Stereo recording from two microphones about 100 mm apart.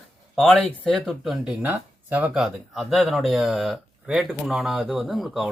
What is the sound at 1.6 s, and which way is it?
Speech, 20° right (ahead or behind).